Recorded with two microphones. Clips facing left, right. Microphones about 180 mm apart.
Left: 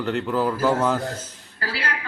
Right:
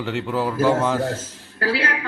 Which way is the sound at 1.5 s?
55° right (ahead or behind).